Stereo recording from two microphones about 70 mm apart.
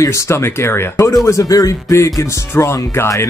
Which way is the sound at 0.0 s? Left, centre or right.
Left.